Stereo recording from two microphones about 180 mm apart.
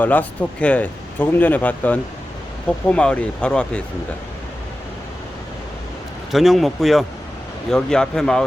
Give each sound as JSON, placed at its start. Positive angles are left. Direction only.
{"t": 0.0, "sound": "speech", "side_deg": 10}
{"t": 6.3, "sound": "speech", "side_deg": 0}